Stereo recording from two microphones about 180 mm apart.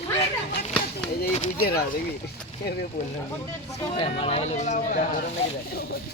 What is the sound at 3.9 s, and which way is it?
Speech, 30° left (ahead or behind).